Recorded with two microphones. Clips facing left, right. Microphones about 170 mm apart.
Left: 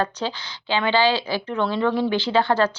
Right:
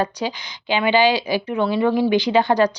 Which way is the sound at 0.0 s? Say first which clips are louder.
Right 2 dB; 15° right (ahead or behind).